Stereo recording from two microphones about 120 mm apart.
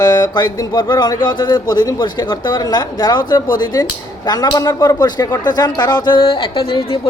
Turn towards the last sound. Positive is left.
turn(degrees=50)  # may be behind; listen again after turning